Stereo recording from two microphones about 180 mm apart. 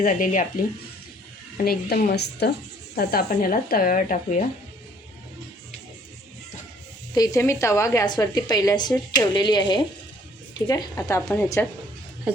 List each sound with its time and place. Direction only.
0.0 s speech: 45° left (ahead or behind)
1.6 s a woman's voice: 55° left (ahead or behind)
7.1 s a woman's voice: 20° left (ahead or behind)